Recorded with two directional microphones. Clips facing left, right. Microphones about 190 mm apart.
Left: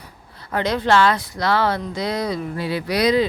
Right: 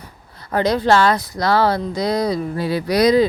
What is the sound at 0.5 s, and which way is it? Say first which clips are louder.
Speech: right 3 dB; 35° right (ahead or behind).